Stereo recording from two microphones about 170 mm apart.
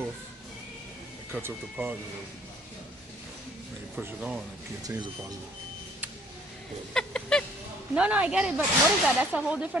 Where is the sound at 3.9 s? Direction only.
5° right (ahead or behind).